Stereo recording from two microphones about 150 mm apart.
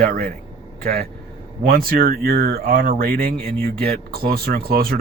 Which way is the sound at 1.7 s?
90° right.